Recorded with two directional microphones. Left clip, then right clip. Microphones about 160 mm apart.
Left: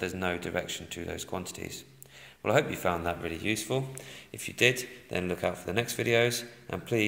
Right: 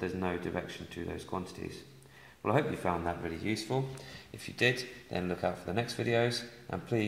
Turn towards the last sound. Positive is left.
turn(degrees=20)  # may be behind; listen again after turning